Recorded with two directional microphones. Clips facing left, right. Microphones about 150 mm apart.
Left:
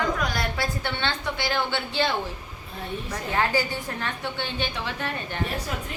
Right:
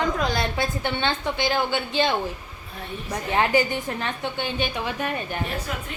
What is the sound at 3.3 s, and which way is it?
A woman's voice, 20° right (ahead or behind).